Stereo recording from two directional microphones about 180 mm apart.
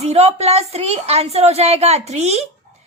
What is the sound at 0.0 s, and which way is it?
A child's voice, 35° right (ahead or behind).